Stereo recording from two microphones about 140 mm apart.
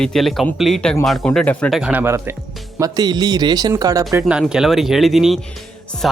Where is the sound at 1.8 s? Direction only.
10° right (ahead or behind).